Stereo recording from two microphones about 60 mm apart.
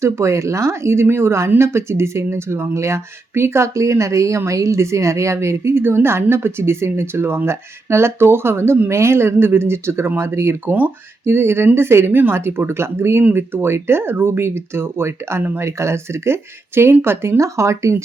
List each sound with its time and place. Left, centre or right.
0.0 s speech: right
10.7 s speech: right
11.3 s speech: right